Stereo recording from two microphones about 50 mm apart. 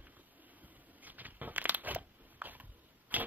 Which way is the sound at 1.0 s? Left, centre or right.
Right.